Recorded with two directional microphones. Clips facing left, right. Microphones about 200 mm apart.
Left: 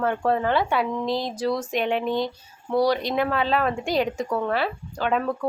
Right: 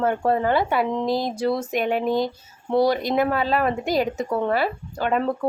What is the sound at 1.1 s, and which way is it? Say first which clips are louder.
Speech: right 2 dB; 50° right (ahead or behind).